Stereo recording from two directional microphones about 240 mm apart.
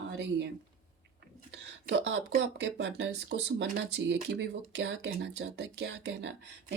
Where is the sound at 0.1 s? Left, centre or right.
Right.